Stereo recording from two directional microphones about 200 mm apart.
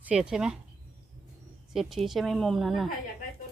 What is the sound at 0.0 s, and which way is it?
Speech, 5° right (ahead or behind).